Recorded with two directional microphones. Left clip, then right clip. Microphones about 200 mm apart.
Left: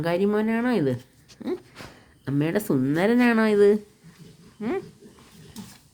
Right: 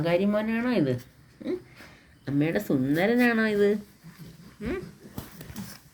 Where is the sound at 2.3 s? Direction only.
45° left (ahead or behind).